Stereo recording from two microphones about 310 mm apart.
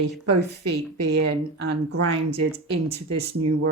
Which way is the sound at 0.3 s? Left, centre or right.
Right.